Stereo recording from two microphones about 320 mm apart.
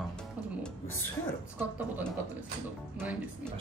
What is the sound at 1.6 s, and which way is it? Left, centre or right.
Speech, centre.